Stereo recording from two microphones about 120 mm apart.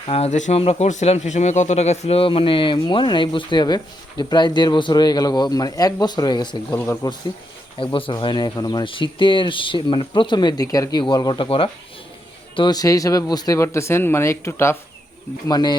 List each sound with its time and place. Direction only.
0.1 s speech: 65° left (ahead or behind)
0.6 s speech: 55° left (ahead or behind)
0.9 s speech: 70° left (ahead or behind); by 6.7 s 40° left (ahead or behind)
6.7 s speech: 20° left (ahead or behind)
7.9 s speech: 45° left (ahead or behind)
8.5 s speech: 35° left (ahead or behind)
11.4 s speech: 50° left (ahead or behind)
12.5 s speech: 35° left (ahead or behind)
15.4 s speech: 35° left (ahead or behind)